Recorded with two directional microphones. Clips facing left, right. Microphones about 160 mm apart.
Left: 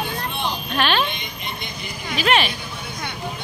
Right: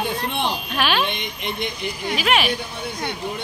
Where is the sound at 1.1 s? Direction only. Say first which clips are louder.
Right 4 dB; 70° right (ahead or behind).